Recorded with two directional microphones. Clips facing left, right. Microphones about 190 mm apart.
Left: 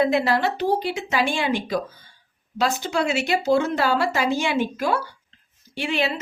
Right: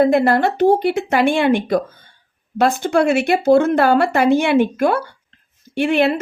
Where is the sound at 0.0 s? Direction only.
50° right (ahead or behind).